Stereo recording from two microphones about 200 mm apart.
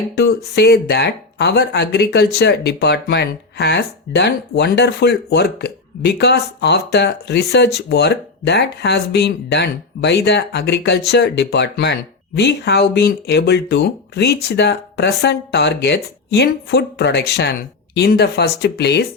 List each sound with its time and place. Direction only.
0.2 s speech: 55° left (ahead or behind)